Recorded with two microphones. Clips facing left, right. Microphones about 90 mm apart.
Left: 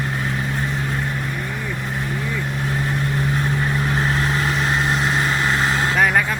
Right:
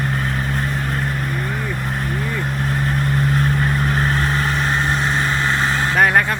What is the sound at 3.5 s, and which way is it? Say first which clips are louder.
Vehicle: right 2 dB; 5° left (ahead or behind).